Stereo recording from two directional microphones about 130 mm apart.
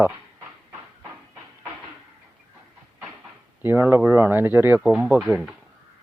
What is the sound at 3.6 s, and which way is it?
Speech, 15° right (ahead or behind).